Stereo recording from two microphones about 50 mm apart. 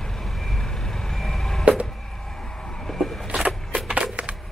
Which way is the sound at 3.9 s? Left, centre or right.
Right.